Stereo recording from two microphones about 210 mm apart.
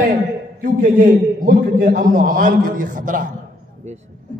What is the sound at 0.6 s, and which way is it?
A man's voice, 40° right (ahead or behind).